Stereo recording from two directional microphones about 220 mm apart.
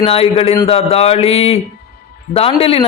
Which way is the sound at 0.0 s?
25° left (ahead or behind).